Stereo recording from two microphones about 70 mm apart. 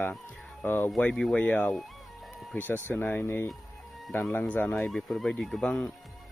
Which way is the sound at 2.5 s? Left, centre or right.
Left.